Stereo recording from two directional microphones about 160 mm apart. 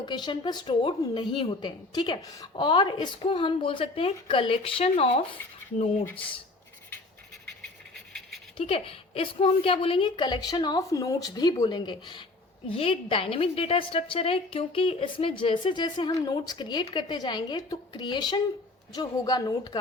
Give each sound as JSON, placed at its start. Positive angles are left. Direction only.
{"t": 0.0, "sound": "a woman's voice", "side_deg": 25}
{"t": 8.5, "sound": "a woman's voice", "side_deg": 35}